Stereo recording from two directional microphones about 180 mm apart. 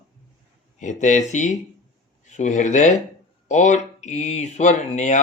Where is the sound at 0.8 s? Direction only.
40° left (ahead or behind).